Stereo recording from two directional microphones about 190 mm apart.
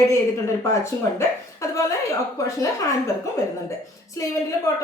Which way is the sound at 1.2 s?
15° left (ahead or behind).